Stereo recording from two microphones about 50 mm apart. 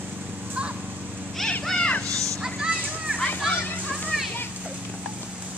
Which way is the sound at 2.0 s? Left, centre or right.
Right.